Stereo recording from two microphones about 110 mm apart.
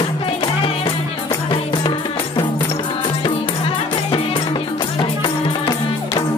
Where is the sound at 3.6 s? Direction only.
55° left (ahead or behind).